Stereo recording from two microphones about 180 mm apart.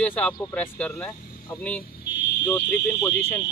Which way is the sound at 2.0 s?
65° left (ahead or behind).